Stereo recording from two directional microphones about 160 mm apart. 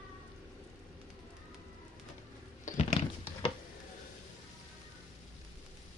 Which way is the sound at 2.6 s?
40° left (ahead or behind).